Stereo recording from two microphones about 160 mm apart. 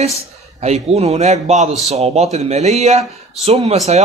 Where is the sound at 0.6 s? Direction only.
40° right (ahead or behind).